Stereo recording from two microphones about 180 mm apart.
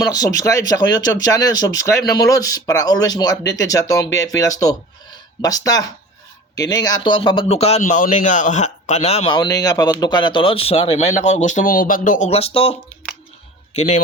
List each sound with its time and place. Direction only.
0.0 s speech: 20° left (ahead or behind); by 12.3 s 45° left (ahead or behind)
12.3 s speech: 35° left (ahead or behind)
13.7 s speech: 35° left (ahead or behind)